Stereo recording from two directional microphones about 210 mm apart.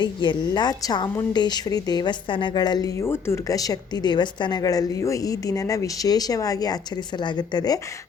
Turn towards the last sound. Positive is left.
turn(degrees=20)  # may be behind; listen again after turning